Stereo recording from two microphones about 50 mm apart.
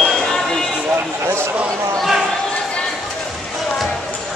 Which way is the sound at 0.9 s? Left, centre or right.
Right.